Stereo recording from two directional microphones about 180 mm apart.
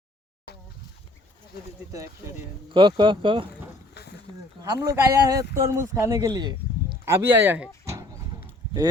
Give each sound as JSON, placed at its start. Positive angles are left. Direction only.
{"t": 2.7, "sound": "speech", "side_deg": -25}
{"t": 4.0, "sound": "a sound", "side_deg": 65}
{"t": 4.8, "sound": "speech", "side_deg": -20}